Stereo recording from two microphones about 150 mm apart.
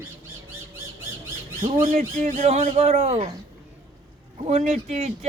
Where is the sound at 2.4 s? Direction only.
45° right (ahead or behind).